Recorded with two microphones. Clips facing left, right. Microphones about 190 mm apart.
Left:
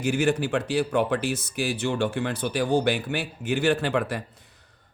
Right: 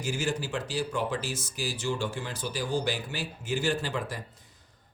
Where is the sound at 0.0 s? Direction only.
60° left (ahead or behind).